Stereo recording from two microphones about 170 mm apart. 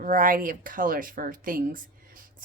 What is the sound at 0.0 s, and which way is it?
Speech, 55° right (ahead or behind).